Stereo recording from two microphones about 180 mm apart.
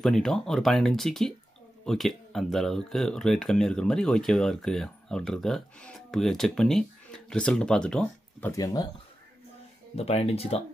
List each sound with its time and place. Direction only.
0.0 s speech: centre (ahead or behind); by 8.8 s 20° left (ahead or behind)
9.9 s speech: 35° left (ahead or behind)